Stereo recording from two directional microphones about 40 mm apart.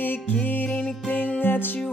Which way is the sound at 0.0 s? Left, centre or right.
Left.